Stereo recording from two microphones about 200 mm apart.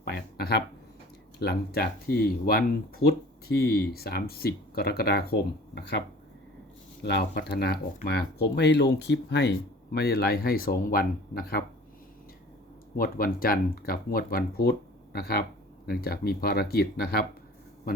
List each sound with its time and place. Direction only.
0.0 s a sound: 50° left (ahead or behind)
1.4 s speech: 55° left (ahead or behind)
7.0 s speech: 55° left (ahead or behind)
13.0 s speech: 45° left (ahead or behind)